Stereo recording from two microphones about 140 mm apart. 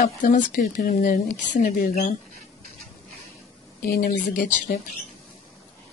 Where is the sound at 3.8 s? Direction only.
90° left.